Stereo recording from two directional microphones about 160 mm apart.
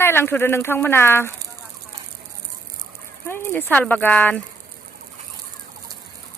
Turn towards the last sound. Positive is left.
turn(degrees=10)  # may be behind; listen again after turning